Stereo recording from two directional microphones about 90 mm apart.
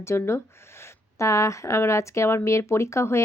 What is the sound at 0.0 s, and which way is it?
Speech, 30° left (ahead or behind).